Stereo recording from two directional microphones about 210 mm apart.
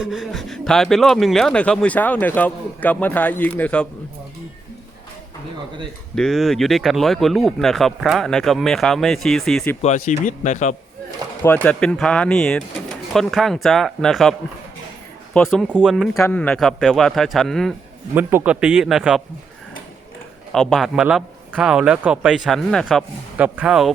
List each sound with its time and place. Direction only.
0.0 s speech: centre (ahead or behind)
6.1 s speech: centre (ahead or behind)
10.1 s speech: 35° left (ahead or behind)
11.4 s speech: 5° left (ahead or behind)
18.1 s speech: 10° right (ahead or behind)
20.5 s speech: centre (ahead or behind)